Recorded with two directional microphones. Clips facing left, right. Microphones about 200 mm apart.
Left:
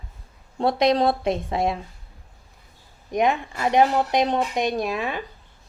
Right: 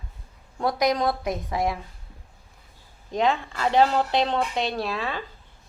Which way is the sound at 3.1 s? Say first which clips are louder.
Left 2 dB; 15° left (ahead or behind).